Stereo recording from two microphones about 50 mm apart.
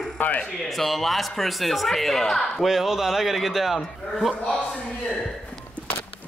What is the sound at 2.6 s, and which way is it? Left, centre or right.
A man's voice, centre.